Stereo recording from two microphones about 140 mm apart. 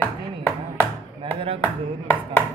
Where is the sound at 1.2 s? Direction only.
35° right (ahead or behind).